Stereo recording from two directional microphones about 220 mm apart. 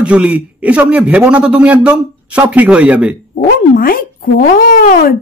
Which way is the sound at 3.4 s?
40° left (ahead or behind).